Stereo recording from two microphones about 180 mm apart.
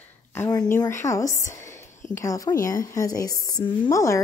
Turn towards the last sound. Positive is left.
turn(degrees=15)  # may be behind; listen again after turning